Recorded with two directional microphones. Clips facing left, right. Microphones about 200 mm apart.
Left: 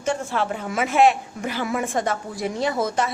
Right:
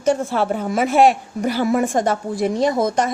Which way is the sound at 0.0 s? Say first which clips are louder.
Right 6 dB; 40° right (ahead or behind).